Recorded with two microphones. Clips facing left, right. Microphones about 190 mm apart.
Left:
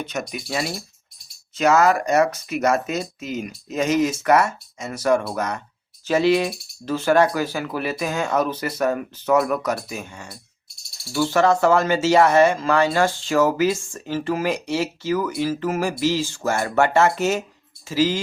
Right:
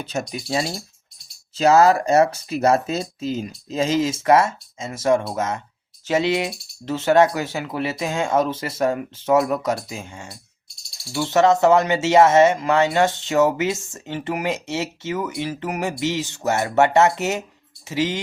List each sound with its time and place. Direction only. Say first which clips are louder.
0.0 s speech: right 1 dB; 30° right (ahead or behind)